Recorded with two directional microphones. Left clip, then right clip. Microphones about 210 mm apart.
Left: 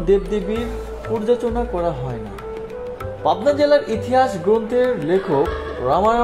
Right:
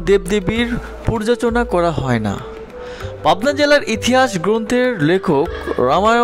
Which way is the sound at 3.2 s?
30° right (ahead or behind).